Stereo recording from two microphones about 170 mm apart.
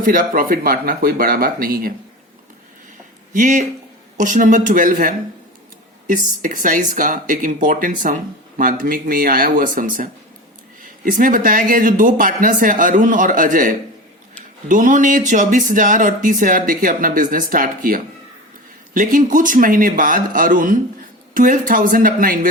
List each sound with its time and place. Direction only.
0.0 s speech: 55° right (ahead or behind)
3.3 s speech: 50° right (ahead or behind)